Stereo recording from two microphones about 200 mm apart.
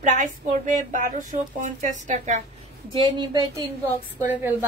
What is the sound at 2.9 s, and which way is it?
Speech, 25° right (ahead or behind).